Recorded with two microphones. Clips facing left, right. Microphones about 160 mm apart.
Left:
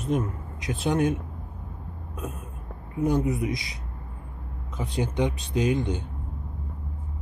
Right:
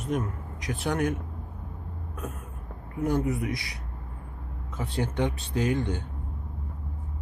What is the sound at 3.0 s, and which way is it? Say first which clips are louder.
Speech: left 2 dB; 20° left (ahead or behind).